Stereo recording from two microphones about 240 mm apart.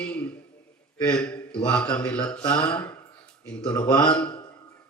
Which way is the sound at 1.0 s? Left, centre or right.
Centre.